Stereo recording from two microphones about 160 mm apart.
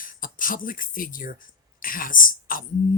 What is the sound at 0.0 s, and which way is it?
Speech, 60° left (ahead or behind).